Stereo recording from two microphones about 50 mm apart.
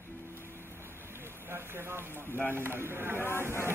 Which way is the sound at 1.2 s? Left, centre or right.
Right.